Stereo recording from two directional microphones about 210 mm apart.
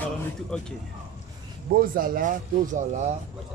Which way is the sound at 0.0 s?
5° left (ahead or behind).